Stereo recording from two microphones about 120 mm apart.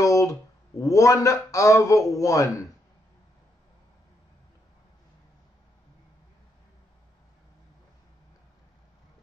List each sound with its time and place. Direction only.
0.0 s speech: 25° left (ahead or behind)